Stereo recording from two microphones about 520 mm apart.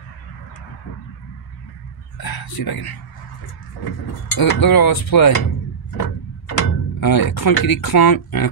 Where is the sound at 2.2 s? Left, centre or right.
Left.